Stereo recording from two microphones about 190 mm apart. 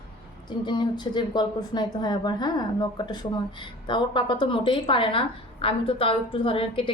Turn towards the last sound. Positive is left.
turn(degrees=30)  # may be behind; listen again after turning